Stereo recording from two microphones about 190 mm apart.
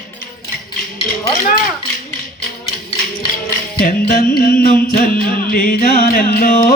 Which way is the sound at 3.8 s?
50° left (ahead or behind).